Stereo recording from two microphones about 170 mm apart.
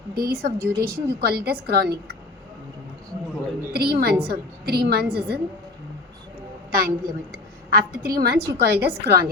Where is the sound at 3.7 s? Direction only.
65° right (ahead or behind).